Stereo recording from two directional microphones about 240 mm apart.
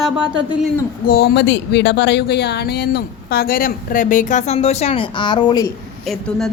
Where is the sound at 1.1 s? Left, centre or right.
Left; by 5.7 s centre.